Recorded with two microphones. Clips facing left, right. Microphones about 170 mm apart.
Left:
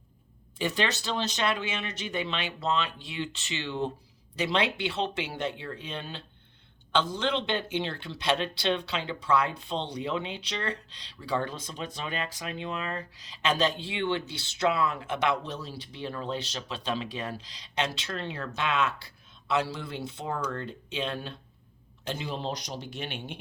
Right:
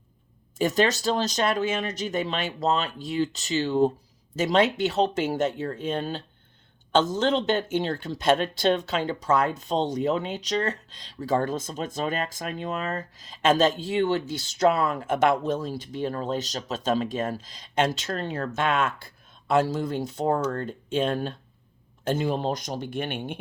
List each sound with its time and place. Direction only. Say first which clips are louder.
0.6 s speech: right 7 dB; 45° right (ahead or behind)